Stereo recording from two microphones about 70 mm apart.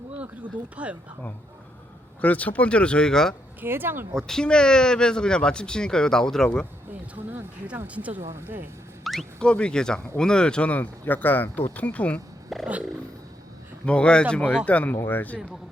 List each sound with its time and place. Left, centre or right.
0.8 s speech: centre
2.2 s speech: left
3.6 s speech: right
4.1 s speech: centre
7.2 s speech: right
8.3 s speech: right
9.1 s a sound: centre
9.4 s speech: centre
12.5 s a sound: centre
13.8 s speech: centre